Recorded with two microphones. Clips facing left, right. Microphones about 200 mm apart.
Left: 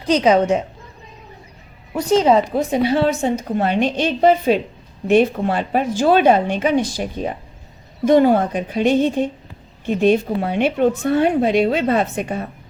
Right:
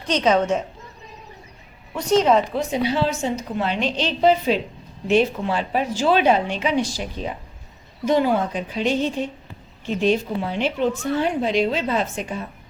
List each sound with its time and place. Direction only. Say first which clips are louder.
0.2 s a woman's voice: left 2 dB; 10° left (ahead or behind)
1.9 s a woman's voice: left 2 dB; 30° left (ahead or behind)
2.5 s a woman's voice: left 5 dB; 55° left (ahead or behind)